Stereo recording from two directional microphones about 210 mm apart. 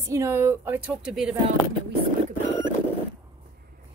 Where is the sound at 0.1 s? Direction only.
15° right (ahead or behind).